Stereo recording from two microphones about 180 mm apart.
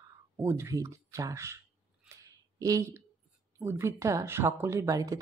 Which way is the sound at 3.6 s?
15° right (ahead or behind).